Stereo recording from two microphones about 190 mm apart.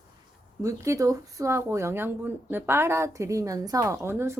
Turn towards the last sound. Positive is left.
turn(degrees=-15)  # may be behind; listen again after turning